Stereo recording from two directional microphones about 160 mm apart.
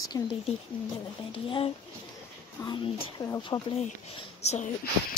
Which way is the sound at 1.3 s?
30° left (ahead or behind).